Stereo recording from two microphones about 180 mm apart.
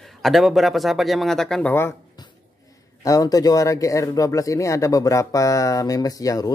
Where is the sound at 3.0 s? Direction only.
20° left (ahead or behind).